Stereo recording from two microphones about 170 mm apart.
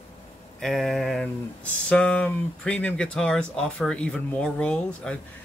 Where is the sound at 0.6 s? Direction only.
Centre (ahead or behind).